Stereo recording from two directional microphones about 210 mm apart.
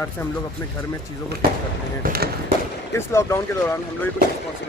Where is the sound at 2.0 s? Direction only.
40° right (ahead or behind).